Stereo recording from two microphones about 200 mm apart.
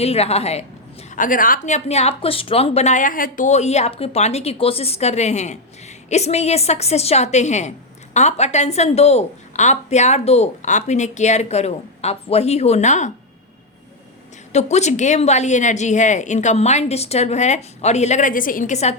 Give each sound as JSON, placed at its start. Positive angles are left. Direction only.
{"t": 0.0, "sound": "a woman's voice", "side_deg": 30}
{"t": 1.1, "sound": "a woman's voice", "side_deg": 40}
{"t": 14.5, "sound": "a woman's voice", "side_deg": 35}